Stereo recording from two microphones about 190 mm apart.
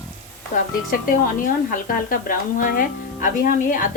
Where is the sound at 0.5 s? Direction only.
45° left (ahead or behind).